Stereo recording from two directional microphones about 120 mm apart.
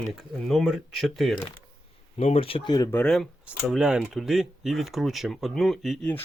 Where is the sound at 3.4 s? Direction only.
5° right (ahead or behind).